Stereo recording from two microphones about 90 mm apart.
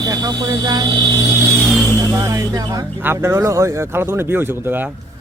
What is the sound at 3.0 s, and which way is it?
Speech, 25° right (ahead or behind).